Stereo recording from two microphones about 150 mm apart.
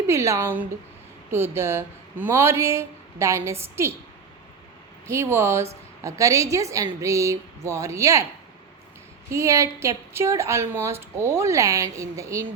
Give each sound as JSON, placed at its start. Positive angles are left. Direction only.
{"t": 0.1, "sound": "a woman's voice", "side_deg": -20}
{"t": 5.0, "sound": "a woman's voice", "side_deg": -15}
{"t": 9.3, "sound": "a woman's voice", "side_deg": -20}